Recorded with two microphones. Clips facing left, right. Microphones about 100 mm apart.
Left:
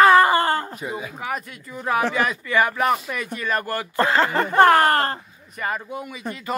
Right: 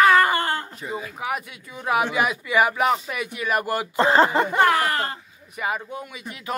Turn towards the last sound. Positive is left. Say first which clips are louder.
# left 3 dB
turn(degrees=5)  # may be behind; listen again after turning